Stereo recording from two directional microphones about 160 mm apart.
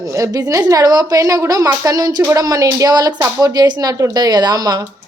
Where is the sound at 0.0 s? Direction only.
20° right (ahead or behind).